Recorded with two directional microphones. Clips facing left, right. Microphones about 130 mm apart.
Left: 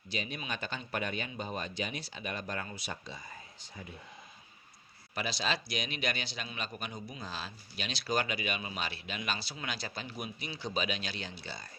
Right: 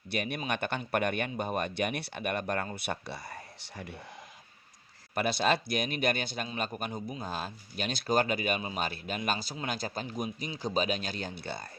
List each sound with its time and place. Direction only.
0.1 s speech: 60° right (ahead or behind)
5.1 s a man's voice: 55° right (ahead or behind)